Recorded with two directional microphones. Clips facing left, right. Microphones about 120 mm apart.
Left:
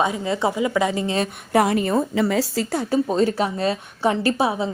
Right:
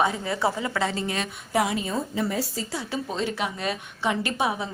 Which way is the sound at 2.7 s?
45° left (ahead or behind).